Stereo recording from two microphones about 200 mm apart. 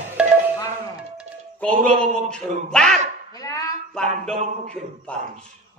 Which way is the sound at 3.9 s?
Centre (ahead or behind).